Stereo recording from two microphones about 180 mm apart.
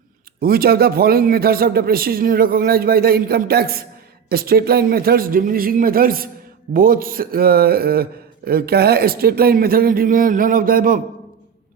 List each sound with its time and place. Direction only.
0.4 s speech: 55° right (ahead or behind)